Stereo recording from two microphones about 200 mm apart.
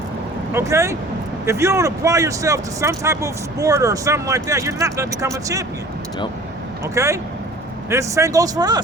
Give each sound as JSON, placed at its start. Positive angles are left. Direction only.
{"t": 0.5, "sound": "speech", "side_deg": -15}
{"t": 6.8, "sound": "speech", "side_deg": -15}